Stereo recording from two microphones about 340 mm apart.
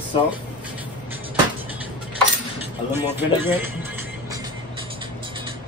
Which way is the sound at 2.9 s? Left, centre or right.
Centre.